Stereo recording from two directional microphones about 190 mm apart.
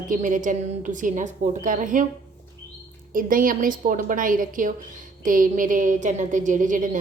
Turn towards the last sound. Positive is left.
turn(degrees=-40)  # may be behind; listen again after turning